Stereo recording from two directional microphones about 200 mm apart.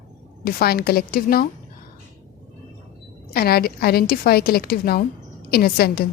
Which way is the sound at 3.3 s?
50° left (ahead or behind).